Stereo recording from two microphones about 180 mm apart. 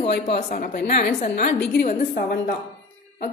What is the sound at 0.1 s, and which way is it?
A woman's voice, 60° left (ahead or behind).